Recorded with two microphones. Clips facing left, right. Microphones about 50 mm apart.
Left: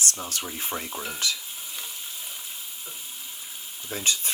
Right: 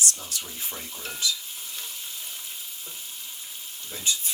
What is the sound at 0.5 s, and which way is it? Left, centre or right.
Stir, left.